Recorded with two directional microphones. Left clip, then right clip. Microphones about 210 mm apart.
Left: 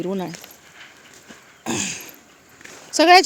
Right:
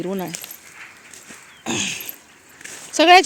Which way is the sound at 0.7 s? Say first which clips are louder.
Right 3 dB; 40° left (ahead or behind).